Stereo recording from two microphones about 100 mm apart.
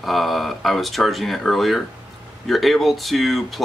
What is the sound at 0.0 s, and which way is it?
Speech, centre (ahead or behind).